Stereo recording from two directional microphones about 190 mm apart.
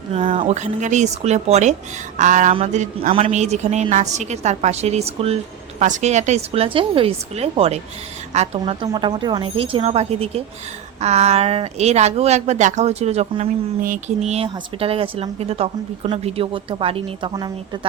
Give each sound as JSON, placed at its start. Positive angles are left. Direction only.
{"t": 0.1, "sound": "a woman's voice", "side_deg": -30}